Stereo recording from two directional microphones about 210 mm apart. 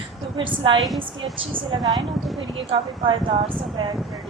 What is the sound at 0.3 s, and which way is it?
A woman's voice, 25° right (ahead or behind).